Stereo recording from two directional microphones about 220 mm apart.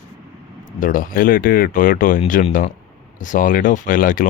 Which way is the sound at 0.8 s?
40° left (ahead or behind).